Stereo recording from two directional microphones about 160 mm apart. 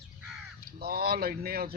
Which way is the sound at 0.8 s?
70° right (ahead or behind).